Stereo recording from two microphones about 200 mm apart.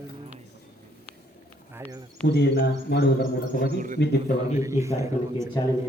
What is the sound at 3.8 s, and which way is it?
Speech, 40° right (ahead or behind).